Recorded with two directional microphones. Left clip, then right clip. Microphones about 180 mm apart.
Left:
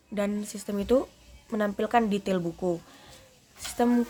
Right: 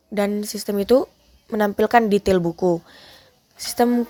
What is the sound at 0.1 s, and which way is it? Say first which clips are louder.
Speech: right 8 dB; 35° right (ahead or behind).